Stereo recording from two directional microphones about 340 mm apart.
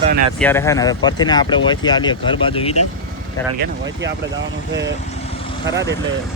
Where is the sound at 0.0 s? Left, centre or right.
Centre.